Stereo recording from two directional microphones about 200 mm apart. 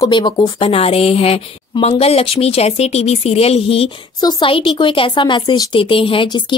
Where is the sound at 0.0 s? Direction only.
20° left (ahead or behind).